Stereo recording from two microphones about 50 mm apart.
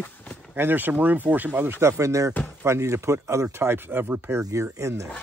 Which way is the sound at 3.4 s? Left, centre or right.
Right.